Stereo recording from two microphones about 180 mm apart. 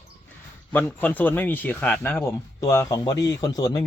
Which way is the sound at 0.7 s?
10° left (ahead or behind).